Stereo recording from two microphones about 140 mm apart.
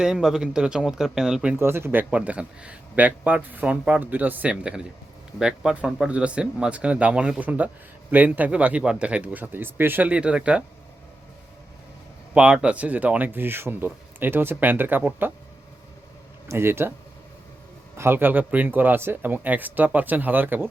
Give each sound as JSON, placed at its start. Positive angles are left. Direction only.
{"t": 0.0, "sound": "speech", "side_deg": -5}
{"t": 1.5, "sound": "speech", "side_deg": -15}
{"t": 12.3, "sound": "speech", "side_deg": -10}
{"t": 16.5, "sound": "speech", "side_deg": -15}
{"t": 17.9, "sound": "speech", "side_deg": -15}